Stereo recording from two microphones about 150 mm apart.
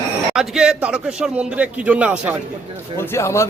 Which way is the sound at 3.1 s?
20° left (ahead or behind).